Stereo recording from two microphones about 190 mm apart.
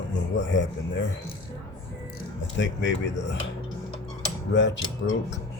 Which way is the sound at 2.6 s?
75° left (ahead or behind).